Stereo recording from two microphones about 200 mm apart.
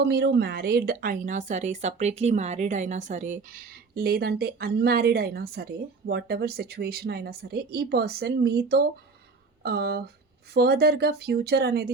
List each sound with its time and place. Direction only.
0.0 s a woman's voice: 55° right (ahead or behind)